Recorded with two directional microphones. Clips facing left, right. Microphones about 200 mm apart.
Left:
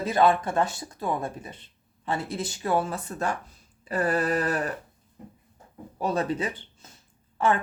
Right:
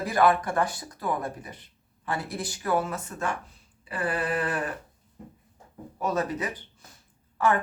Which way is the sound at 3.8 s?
40° left (ahead or behind).